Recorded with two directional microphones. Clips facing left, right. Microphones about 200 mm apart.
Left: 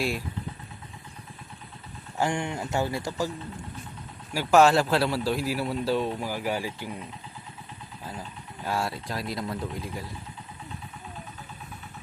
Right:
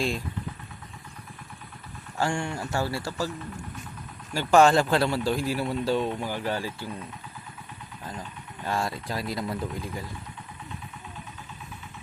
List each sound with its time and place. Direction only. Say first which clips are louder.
2.1 s speech: even; 20° left (ahead or behind)
4.4 s speech: even; 5° left (ahead or behind)